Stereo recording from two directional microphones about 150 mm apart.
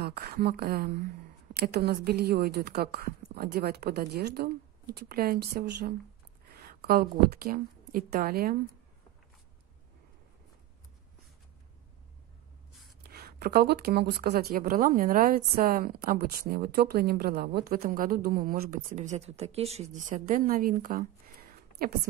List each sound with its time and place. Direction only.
0.0 s a woman's voice: 90° right; by 1.0 s 70° right (ahead or behind)
1.5 s a woman's voice: 90° right
13.1 s speech: 90° right